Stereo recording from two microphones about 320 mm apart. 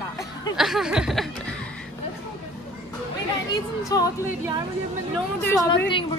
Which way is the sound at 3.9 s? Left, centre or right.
Centre.